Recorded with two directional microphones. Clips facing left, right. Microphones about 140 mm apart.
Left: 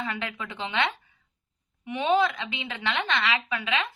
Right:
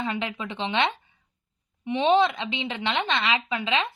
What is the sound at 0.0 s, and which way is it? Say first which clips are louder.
A woman's voice: right 3 dB; 20° right (ahead or behind).